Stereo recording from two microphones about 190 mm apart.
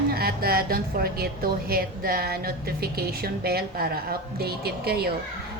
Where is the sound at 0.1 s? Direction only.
55° right (ahead or behind).